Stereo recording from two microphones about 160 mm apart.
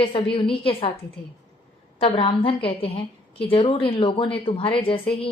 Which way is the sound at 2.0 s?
30° left (ahead or behind).